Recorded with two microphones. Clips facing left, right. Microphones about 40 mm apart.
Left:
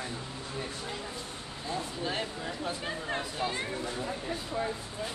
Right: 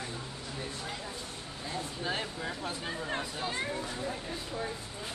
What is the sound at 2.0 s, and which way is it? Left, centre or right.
Speech, centre.